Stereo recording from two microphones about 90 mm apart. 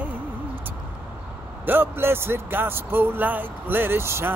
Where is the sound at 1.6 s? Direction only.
25° right (ahead or behind).